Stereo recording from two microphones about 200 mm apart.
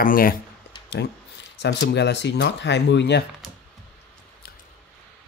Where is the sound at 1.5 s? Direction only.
60° left (ahead or behind).